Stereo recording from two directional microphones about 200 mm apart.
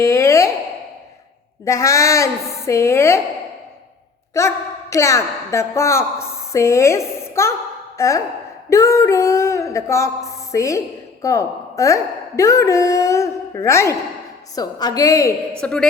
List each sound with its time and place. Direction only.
0.0 s a sound: 15° left (ahead or behind)
1.6 s a woman's voice: 15° left (ahead or behind)
4.4 s a woman's voice: 15° left (ahead or behind)
8.7 s a sound: 15° left (ahead or behind)
14.5 s a woman's voice: 20° left (ahead or behind)
15.6 s a woman's voice: 5° left (ahead or behind)